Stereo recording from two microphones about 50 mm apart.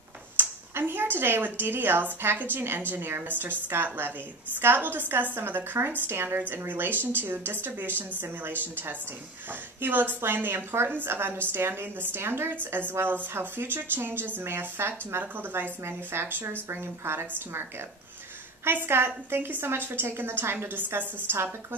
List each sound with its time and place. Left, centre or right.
0.4 s a woman's voice: right
9.5 s a woman's voice: right
13.0 s a woman's voice: right
15.3 s a woman's voice: right
15.8 s a woman's voice: right
18.6 s a woman's voice: right